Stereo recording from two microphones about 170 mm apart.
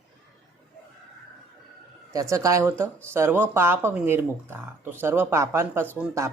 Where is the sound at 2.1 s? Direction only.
20° right (ahead or behind).